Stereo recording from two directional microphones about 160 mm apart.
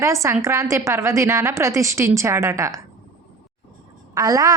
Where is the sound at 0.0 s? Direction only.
20° right (ahead or behind).